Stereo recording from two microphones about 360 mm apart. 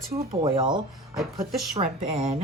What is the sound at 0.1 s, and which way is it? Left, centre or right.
Speech, centre.